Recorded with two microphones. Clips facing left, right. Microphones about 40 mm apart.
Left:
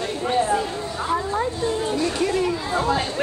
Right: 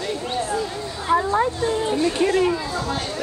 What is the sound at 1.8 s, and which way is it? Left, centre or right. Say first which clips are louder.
Speech: right 2 dB; right.